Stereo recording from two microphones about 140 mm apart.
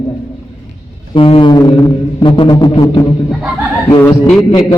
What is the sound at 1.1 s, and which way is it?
A man's voice, 40° left (ahead or behind).